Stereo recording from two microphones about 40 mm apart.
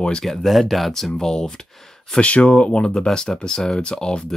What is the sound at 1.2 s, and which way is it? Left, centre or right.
Speech, centre.